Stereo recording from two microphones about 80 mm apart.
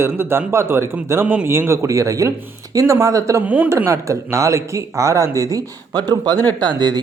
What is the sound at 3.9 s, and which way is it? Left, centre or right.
Speech, right.